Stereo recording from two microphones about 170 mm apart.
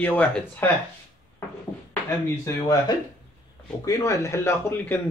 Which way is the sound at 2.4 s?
25° left (ahead or behind).